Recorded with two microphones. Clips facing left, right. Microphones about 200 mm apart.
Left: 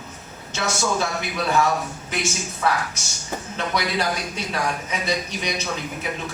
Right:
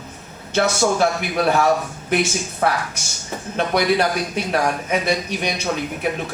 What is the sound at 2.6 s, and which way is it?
Speech, 65° right (ahead or behind).